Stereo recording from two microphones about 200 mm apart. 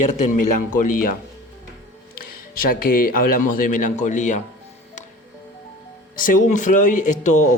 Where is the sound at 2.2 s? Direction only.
45° left (ahead or behind).